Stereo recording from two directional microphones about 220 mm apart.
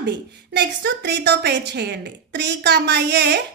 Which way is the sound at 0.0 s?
50° right (ahead or behind).